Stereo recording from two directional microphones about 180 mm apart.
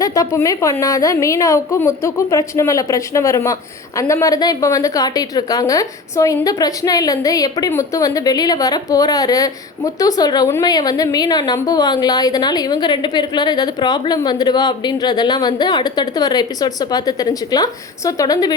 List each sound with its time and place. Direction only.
0.0 s a woman's voice: 20° left (ahead or behind)